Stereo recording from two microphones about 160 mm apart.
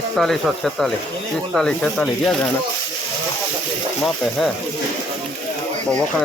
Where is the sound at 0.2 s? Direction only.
Centre (ahead or behind).